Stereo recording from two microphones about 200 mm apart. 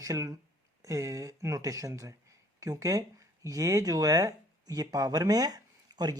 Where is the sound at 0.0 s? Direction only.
15° right (ahead or behind).